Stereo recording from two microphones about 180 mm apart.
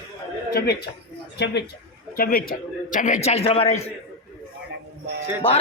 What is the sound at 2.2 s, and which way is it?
A man's voice, 55° left (ahead or behind).